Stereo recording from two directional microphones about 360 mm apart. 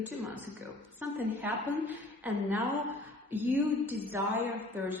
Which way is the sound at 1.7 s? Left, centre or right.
Centre.